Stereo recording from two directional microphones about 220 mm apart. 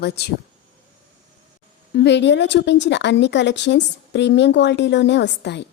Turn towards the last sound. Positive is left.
turn(degrees=50)  # may be behind; listen again after turning